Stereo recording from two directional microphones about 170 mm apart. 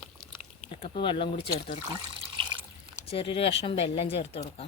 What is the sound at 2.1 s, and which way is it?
Water, 30° right (ahead or behind).